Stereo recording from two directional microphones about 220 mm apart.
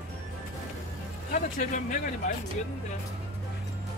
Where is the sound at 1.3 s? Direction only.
35° left (ahead or behind).